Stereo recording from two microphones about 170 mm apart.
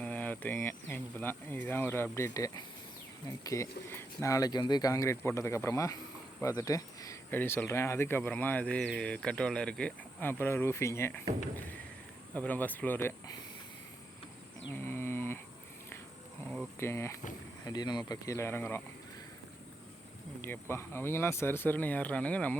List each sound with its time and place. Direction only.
0.0 s speech: 10° left (ahead or behind)
12.3 s speech: 10° left (ahead or behind)
14.7 s a sound: 15° left (ahead or behind)
16.8 s speech: 15° left (ahead or behind)
20.4 s speech: 15° left (ahead or behind)